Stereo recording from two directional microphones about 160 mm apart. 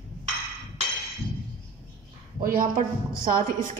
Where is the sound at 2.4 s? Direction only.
60° right (ahead or behind).